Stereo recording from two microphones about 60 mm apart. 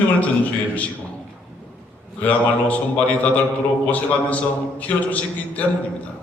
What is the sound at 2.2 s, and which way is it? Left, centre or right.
A man's voice, left.